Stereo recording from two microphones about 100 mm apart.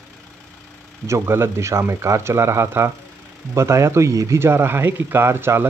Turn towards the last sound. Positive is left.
turn(degrees=-25)  # may be behind; listen again after turning